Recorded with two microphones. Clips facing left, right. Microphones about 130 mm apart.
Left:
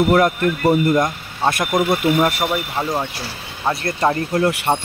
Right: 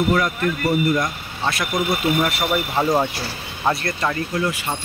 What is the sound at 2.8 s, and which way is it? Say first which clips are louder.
Speech: right 5 dB; 10° right (ahead or behind).